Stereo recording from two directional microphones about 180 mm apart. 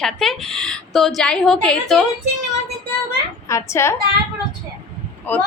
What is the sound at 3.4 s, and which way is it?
Speech, 15° left (ahead or behind).